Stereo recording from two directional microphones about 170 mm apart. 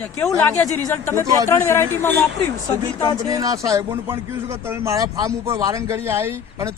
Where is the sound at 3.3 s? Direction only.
20° right (ahead or behind).